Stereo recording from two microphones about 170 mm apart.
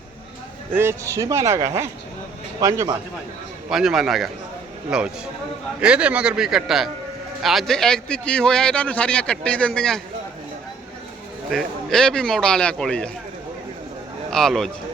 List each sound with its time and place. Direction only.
0.7 s speech: 15° right (ahead or behind)
3.7 s a man's voice: centre (ahead or behind)
11.5 s a man's voice: 5° left (ahead or behind)
14.3 s a man's voice: centre (ahead or behind)